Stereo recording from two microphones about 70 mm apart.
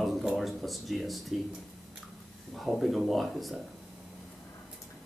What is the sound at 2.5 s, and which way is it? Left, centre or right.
Speech, centre.